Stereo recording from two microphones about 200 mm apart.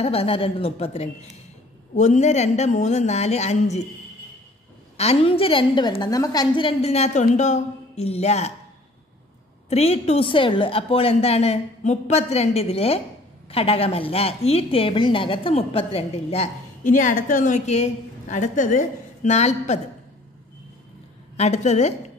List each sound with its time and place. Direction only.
0.0 s a woman's voice: 30° left (ahead or behind)
4.9 s a woman's voice: 30° left (ahead or behind)
9.7 s a woman's voice: 30° left (ahead or behind)
21.4 s a woman's voice: 35° left (ahead or behind)